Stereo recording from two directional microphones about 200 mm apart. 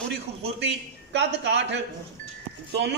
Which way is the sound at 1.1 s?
60° right (ahead or behind).